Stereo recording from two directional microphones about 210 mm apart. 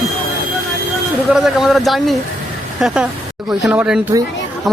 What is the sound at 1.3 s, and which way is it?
Speech, centre (ahead or behind).